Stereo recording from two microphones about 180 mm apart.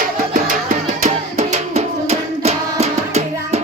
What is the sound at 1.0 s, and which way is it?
Music, 40° right (ahead or behind).